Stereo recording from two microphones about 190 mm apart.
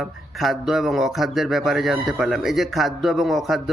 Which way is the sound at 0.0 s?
Centre (ahead or behind).